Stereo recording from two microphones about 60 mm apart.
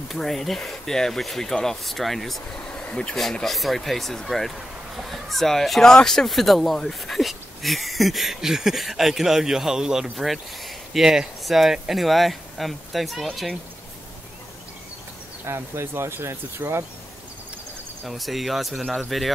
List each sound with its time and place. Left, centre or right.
0.1 s speech: centre
2.7 s a sound: centre
3.2 s speech: centre
15.4 s speech: right
18.0 s speech: centre